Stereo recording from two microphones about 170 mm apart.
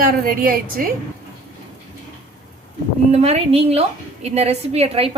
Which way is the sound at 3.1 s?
40° right (ahead or behind).